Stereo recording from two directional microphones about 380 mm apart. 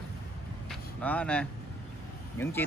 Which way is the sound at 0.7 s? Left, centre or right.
Centre.